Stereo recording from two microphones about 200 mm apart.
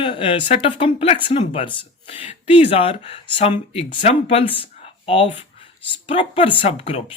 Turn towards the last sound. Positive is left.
turn(degrees=30)  # may be behind; listen again after turning